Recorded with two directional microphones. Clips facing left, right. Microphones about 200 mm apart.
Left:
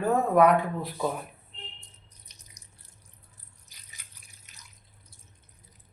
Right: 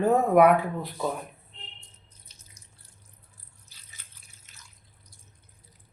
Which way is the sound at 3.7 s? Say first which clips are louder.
Left 1 dB; 15° left (ahead or behind).